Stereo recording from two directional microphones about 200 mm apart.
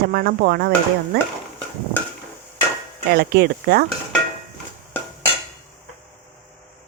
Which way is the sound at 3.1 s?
55° right (ahead or behind).